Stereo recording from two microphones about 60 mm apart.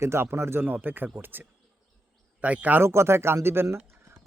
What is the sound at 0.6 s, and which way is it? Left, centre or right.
A man's voice, right.